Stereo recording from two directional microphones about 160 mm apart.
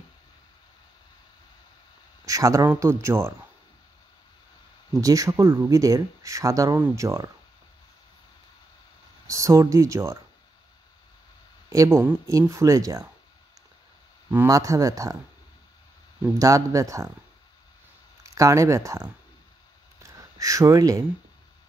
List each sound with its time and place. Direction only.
2.2 s speech: 20° right (ahead or behind)
5.0 s speech: 20° right (ahead or behind)
9.3 s speech: 20° right (ahead or behind)
11.7 s speech: 20° right (ahead or behind)
14.3 s speech: 20° right (ahead or behind)
16.3 s speech: 20° right (ahead or behind)
18.3 s speech: 20° right (ahead or behind)
20.0 s gasp: 20° right (ahead or behind)